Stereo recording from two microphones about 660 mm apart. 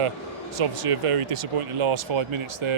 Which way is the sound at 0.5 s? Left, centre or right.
Right.